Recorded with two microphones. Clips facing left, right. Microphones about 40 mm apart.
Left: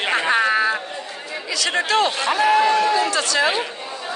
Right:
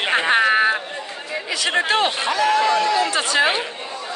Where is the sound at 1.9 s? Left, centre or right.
Right.